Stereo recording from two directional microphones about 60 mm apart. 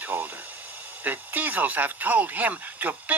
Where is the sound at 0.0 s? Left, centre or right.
Right.